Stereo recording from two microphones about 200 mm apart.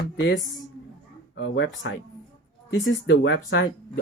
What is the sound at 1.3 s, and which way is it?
Speech, 70° left (ahead or behind).